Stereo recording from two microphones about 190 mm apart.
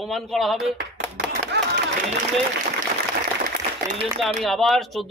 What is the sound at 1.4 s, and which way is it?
Music, 65° right (ahead or behind).